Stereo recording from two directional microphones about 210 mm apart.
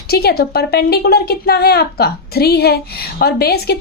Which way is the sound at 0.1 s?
50° left (ahead or behind).